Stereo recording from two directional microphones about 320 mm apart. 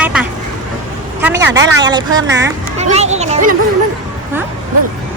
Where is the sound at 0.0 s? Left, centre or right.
Centre.